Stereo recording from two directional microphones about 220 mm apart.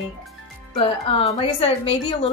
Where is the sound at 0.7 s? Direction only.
25° left (ahead or behind).